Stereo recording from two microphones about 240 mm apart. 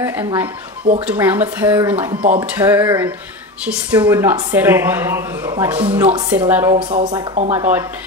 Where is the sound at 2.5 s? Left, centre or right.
Centre.